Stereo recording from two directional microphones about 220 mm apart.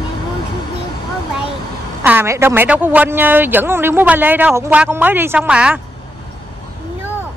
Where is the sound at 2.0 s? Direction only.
10° right (ahead or behind).